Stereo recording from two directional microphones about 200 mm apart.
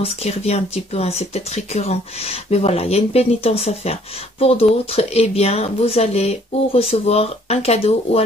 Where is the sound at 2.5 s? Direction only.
30° left (ahead or behind).